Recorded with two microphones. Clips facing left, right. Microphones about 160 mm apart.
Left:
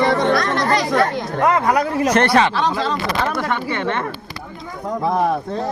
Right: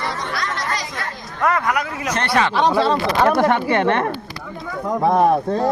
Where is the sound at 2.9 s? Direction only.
60° right (ahead or behind).